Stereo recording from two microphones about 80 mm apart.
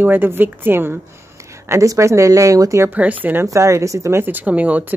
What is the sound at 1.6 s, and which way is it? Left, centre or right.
Speech, right.